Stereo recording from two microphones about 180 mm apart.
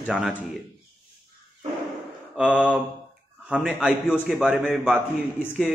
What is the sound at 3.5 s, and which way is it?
A man's voice, 5° right (ahead or behind).